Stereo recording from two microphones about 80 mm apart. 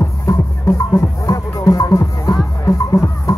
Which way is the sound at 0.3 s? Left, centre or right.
Left.